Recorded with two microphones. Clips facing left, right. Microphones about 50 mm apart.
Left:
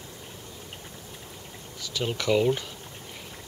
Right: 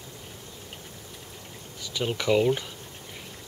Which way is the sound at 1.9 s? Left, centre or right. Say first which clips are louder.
Right 1 dB; centre.